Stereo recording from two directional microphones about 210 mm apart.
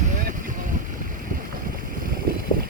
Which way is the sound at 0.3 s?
40° right (ahead or behind).